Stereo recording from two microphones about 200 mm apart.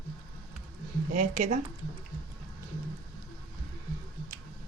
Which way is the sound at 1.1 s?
40° right (ahead or behind).